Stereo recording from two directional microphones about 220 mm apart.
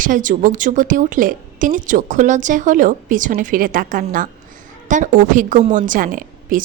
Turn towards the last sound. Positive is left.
turn(degrees=-40)  # may be behind; listen again after turning